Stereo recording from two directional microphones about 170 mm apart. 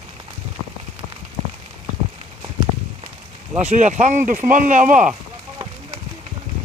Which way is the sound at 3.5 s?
45° right (ahead or behind).